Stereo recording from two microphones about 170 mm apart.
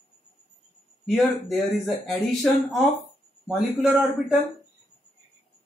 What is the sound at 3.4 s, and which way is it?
Speech, centre (ahead or behind).